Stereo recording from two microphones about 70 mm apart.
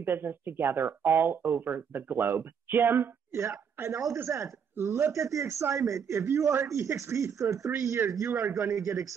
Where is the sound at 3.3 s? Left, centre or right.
Right.